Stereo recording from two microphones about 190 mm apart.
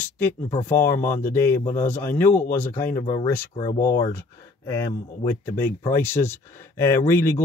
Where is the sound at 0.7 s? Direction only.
15° left (ahead or behind).